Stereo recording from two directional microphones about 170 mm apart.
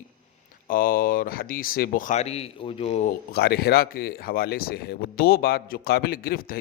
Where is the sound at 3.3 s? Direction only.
70° left (ahead or behind).